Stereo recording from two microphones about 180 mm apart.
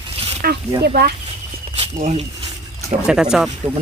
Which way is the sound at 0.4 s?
55° right (ahead or behind).